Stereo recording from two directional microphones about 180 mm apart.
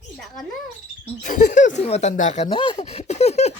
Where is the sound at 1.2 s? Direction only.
45° left (ahead or behind).